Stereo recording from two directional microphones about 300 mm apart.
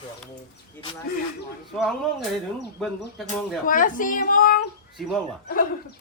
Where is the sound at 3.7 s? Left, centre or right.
Left.